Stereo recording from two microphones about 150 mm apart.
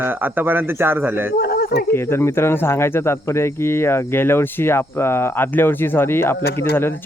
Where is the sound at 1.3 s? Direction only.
90° left.